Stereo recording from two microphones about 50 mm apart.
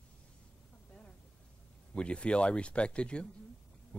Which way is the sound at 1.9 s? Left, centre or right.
Left.